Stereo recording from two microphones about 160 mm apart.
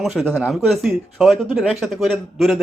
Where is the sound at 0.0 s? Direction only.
Centre (ahead or behind).